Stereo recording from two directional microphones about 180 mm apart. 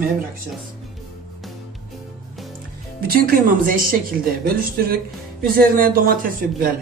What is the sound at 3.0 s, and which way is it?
A woman's voice, 55° right (ahead or behind).